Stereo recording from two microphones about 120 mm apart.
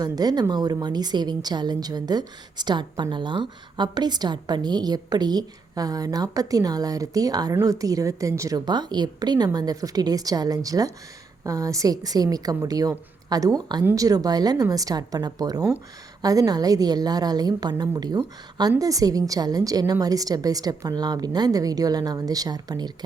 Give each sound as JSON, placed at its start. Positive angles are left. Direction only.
{"t": 0.0, "sound": "a woman's voice", "side_deg": -35}